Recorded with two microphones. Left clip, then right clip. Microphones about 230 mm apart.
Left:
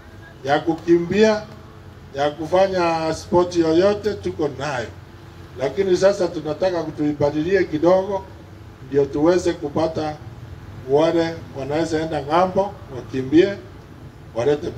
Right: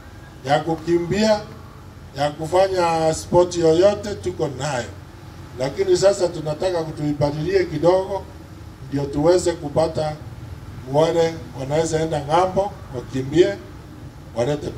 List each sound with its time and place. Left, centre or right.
0.5 s speech: right
8.9 s a man's voice: right